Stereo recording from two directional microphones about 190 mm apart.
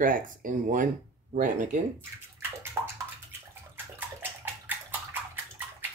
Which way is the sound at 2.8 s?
15° right (ahead or behind).